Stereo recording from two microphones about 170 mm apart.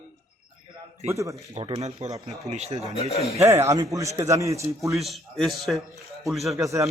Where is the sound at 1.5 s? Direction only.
35° right (ahead or behind).